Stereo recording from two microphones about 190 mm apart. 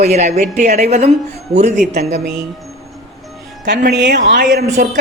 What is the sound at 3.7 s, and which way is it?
Speech, 60° right (ahead or behind).